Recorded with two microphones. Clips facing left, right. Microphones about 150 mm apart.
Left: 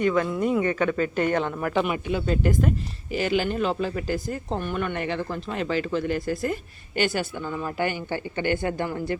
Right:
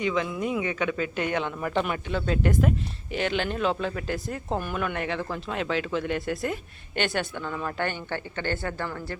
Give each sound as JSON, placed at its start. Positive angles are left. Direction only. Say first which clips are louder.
{"t": 0.0, "sound": "speech", "louder": "left 4 dB", "side_deg": 50}
{"t": 0.9, "sound": "speech", "louder": "left 4 dB", "side_deg": -5}